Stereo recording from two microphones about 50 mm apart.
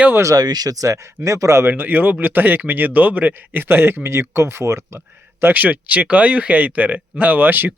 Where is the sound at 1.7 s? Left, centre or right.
Right.